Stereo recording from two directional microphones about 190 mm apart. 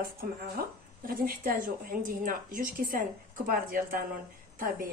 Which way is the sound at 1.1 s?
50° right (ahead or behind).